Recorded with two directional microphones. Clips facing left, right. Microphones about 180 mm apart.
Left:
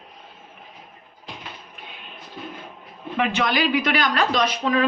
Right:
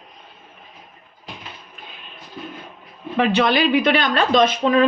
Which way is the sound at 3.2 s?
30° right (ahead or behind).